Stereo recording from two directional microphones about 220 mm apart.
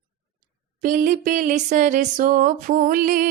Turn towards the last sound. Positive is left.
turn(degrees=-40)  # may be behind; listen again after turning